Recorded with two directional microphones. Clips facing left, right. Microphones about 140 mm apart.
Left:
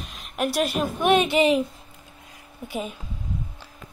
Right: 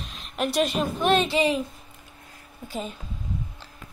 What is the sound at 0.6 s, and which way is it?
A woman's voice, 10° left (ahead or behind).